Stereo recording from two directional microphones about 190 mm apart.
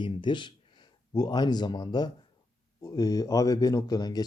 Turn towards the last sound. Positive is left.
turn(degrees=20)  # may be behind; listen again after turning